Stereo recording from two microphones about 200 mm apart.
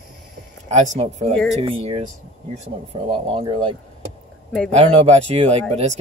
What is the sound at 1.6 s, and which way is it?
Speech, 25° right (ahead or behind).